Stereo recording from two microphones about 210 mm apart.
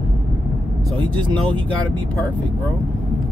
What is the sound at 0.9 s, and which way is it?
Speech, 25° right (ahead or behind).